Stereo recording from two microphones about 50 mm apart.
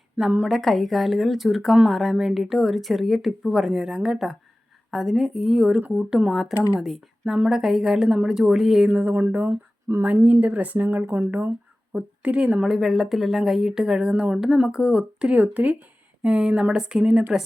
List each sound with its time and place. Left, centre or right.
0.4 s speech: centre
4.9 s speech: centre
6.3 s speech: centre
8.9 s a woman's voice: right
10.9 s speech: right
11.2 s a woman's voice: right
12.6 s speech: centre
14.3 s speech: centre
15.4 s a woman's voice: right